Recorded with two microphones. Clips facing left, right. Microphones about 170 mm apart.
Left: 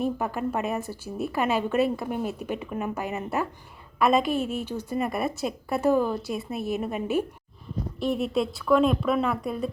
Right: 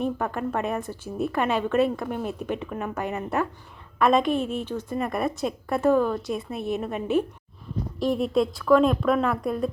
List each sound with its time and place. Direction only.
0.0 s a woman's voice: 5° left (ahead or behind)